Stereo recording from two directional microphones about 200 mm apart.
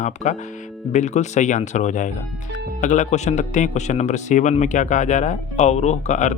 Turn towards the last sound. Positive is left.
turn(degrees=35)  # may be behind; listen again after turning